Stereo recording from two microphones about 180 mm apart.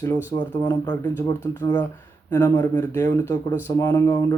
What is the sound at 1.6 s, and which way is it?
Speech, 10° left (ahead or behind).